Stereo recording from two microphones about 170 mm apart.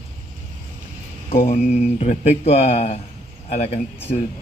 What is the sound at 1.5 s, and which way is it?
Speech, 40° left (ahead or behind).